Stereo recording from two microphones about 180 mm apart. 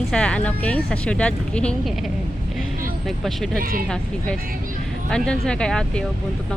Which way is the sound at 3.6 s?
50° right (ahead or behind).